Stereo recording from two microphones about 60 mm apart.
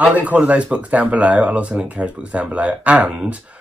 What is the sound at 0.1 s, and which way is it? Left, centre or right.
Speech, right.